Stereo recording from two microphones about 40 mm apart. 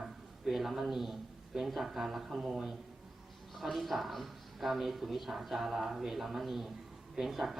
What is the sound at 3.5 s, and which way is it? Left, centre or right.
Speech, centre.